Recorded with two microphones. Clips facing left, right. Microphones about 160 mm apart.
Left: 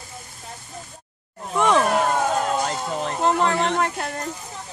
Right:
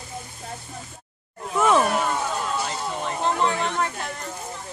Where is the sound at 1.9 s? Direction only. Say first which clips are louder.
Left 4 dB; 45° left (ahead or behind).